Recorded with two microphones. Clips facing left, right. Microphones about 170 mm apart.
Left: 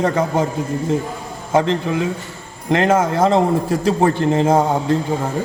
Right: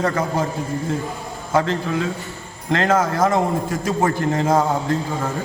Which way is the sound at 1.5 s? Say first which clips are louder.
Left 3 dB; 20° left (ahead or behind).